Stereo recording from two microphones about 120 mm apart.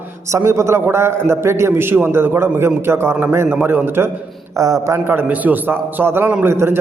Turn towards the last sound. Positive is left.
turn(degrees=-20)  # may be behind; listen again after turning